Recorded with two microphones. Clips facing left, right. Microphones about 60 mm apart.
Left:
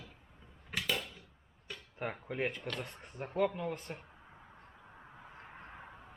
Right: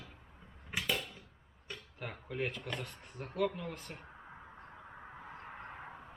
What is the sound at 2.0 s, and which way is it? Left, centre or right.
Speech, left.